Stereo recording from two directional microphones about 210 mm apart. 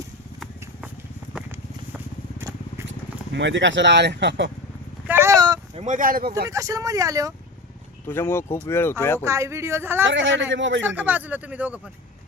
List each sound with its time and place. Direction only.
1.3 s horse: 5° right (ahead or behind)
3.3 s speech: 60° right (ahead or behind)
5.0 s a sound: 10° right (ahead or behind)
5.8 s speech: 35° right (ahead or behind)
6.5 s speech: 15° right (ahead or behind)
8.0 s speech: 10° left (ahead or behind)
9.2 s speech: 15° right (ahead or behind)
10.0 s speech: 60° right (ahead or behind)
10.8 s speech: 10° right (ahead or behind)